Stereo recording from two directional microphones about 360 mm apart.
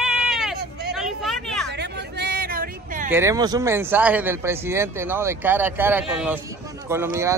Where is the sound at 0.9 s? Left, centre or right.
Centre.